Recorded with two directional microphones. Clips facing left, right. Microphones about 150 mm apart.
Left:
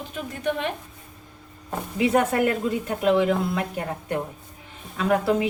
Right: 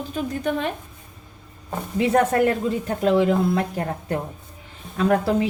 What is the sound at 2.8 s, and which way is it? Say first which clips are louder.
Speech: right 2 dB; 35° right (ahead or behind).